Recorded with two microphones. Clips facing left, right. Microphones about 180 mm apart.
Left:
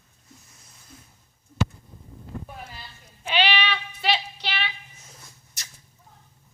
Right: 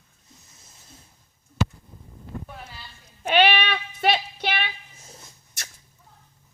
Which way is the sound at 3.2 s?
50° right (ahead or behind).